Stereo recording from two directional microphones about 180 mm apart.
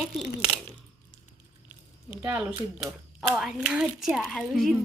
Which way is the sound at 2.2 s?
5° right (ahead or behind).